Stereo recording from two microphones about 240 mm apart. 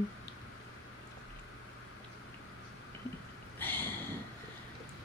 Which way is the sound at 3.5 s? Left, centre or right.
Centre.